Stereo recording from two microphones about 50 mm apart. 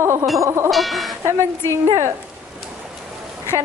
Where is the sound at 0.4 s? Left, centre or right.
Right.